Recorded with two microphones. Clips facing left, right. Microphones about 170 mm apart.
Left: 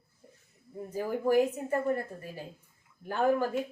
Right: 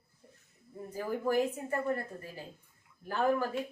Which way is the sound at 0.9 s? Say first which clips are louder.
Left 4 dB; 15° left (ahead or behind).